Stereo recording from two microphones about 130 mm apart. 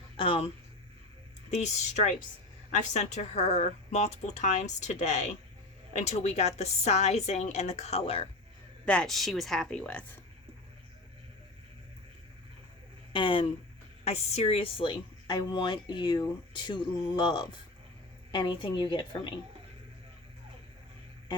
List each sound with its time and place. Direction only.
0.2 s speech: 45° left (ahead or behind)
1.5 s speech: 60° left (ahead or behind)
8.9 s speech: 5° left (ahead or behind)
13.1 s a woman's voice: 40° left (ahead or behind)
14.0 s a woman's voice: 55° left (ahead or behind); by 19.3 s 35° left (ahead or behind)